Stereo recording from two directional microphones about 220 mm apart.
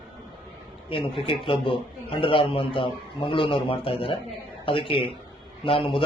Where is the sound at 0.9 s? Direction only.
25° left (ahead or behind).